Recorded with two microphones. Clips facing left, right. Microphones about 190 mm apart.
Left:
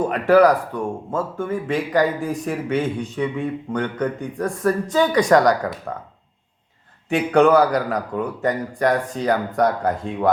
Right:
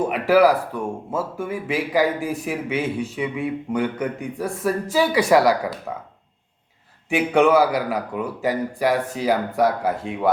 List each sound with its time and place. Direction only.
0.0 s speech: 5° right (ahead or behind)
7.1 s a man's voice: 5° right (ahead or behind)